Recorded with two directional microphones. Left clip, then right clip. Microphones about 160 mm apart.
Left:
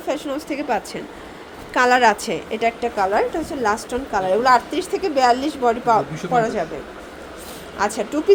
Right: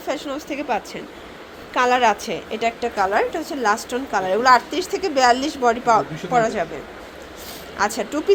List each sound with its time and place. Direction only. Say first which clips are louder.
0.1 s a woman's voice: left 2 dB; 15° left (ahead or behind)
7.8 s a woman's voice: even; 10° left (ahead or behind)